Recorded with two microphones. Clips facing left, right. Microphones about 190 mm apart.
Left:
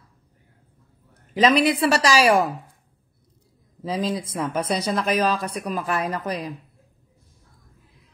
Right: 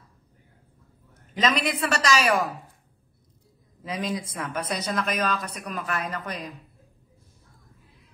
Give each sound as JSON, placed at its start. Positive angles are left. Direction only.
{"t": 1.4, "sound": "speech", "side_deg": 35}
{"t": 3.8, "sound": "speech", "side_deg": 30}